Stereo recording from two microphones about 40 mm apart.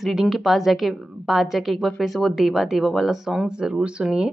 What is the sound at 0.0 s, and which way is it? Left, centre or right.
A woman's voice, centre.